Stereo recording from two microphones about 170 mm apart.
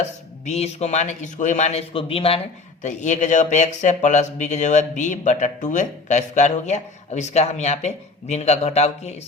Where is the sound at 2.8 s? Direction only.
45° left (ahead or behind).